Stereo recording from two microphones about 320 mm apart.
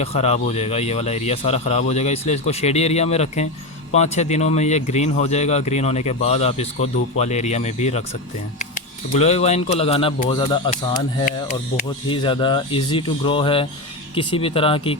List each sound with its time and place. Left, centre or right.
0.0 s speech: centre
9.1 s speech: centre
12.0 s speech: centre